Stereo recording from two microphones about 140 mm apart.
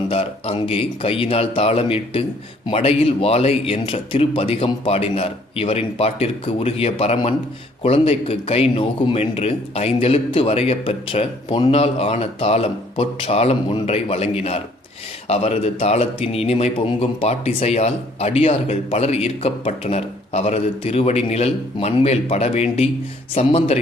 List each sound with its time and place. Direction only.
0.1 s a man's voice: 45° left (ahead or behind)
9.2 s a man's voice: 50° left (ahead or behind)